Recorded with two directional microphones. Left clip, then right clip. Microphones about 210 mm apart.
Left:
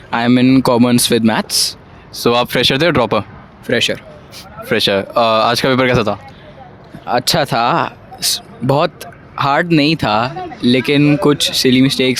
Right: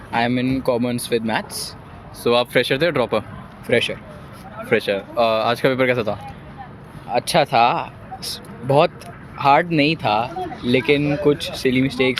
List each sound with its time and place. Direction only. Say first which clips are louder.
0.1 s speech: left 7 dB; 50° left (ahead or behind)
3.7 s speech: left 4 dB; 45° left (ahead or behind)
4.7 s speech: left 6 dB; 55° left (ahead or behind)